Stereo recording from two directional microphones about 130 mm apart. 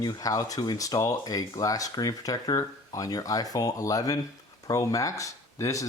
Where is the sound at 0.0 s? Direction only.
25° left (ahead or behind).